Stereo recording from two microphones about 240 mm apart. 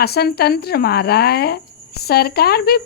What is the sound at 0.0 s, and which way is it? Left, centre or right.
Speech, left.